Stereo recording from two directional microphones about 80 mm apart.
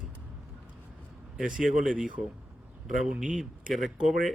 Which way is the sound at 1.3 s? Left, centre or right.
Centre.